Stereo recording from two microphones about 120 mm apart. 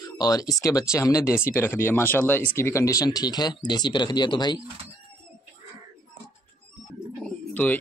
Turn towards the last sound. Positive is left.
turn(degrees=15)  # may be behind; listen again after turning